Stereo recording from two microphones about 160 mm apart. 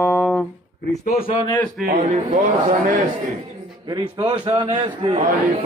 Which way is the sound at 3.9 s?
25° right (ahead or behind).